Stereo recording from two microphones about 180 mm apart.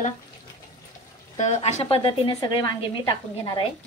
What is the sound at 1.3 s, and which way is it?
A woman's voice, 40° left (ahead or behind).